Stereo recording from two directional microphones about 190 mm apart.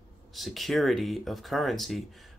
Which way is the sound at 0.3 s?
Centre (ahead or behind).